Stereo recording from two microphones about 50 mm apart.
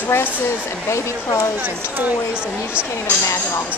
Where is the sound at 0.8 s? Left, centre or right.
Left.